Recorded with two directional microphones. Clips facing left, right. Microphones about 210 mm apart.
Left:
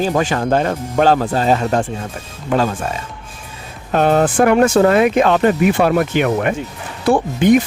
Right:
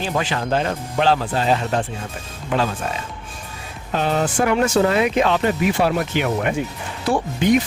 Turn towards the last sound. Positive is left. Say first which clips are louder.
# left 5 dB
turn(degrees=55)  # may be behind; listen again after turning